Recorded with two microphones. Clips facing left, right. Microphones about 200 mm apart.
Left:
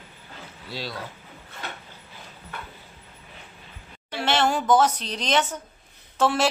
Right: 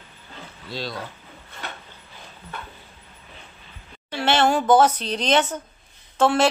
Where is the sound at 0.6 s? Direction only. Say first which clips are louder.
Right 3 dB; 10° left (ahead or behind).